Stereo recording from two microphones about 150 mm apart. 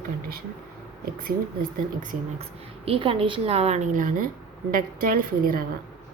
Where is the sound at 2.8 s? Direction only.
35° right (ahead or behind); by 5.7 s 75° right (ahead or behind).